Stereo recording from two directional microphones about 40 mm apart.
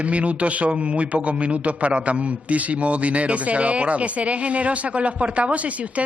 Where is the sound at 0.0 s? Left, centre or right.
Right.